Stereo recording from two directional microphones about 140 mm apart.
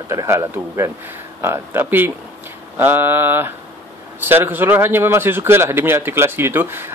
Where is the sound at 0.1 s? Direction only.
20° right (ahead or behind).